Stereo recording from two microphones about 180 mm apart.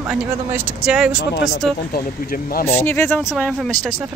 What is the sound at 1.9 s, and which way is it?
Speech, 55° left (ahead or behind).